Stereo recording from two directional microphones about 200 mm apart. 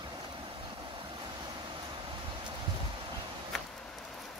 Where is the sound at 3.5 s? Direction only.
Centre (ahead or behind).